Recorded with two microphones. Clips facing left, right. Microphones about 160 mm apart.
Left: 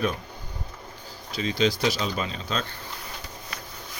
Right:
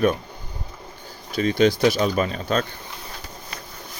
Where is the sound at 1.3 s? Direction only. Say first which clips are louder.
Right 6 dB; 55° right (ahead or behind).